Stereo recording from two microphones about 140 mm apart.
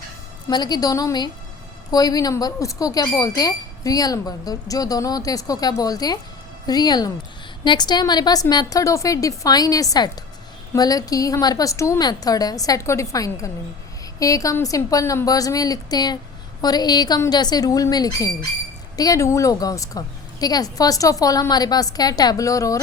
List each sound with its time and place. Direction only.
0.4 s a woman's voice: 30° left (ahead or behind)